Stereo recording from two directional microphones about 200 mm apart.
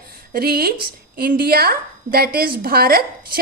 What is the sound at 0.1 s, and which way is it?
A woman's voice, 50° right (ahead or behind).